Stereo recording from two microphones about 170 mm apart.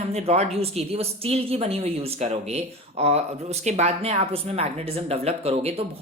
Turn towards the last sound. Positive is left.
turn(degrees=-35)  # may be behind; listen again after turning